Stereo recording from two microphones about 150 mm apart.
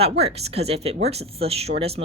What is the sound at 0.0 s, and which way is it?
Speech, 45° right (ahead or behind).